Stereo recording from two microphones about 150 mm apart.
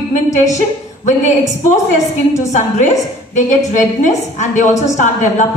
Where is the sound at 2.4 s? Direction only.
50° left (ahead or behind).